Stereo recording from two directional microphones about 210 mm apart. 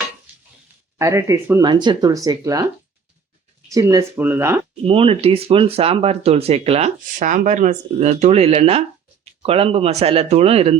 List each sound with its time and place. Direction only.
0.9 s speech: 15° right (ahead or behind)
3.7 s speech: 15° right (ahead or behind)
4.8 s speech: 25° right (ahead or behind)